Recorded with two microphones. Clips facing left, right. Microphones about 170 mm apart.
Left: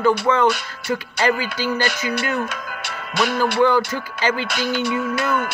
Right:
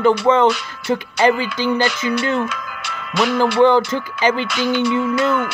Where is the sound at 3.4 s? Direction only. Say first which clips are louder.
Right 4 dB; 20° right (ahead or behind).